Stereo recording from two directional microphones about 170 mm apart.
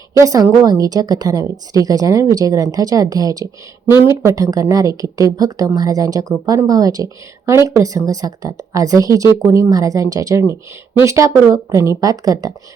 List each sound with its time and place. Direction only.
0.2 s a woman's voice: 20° right (ahead or behind)